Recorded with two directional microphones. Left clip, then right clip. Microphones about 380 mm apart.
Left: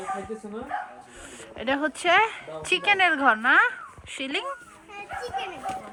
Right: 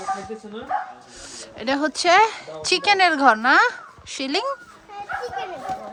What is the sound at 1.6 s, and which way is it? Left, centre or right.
A woman's voice, centre.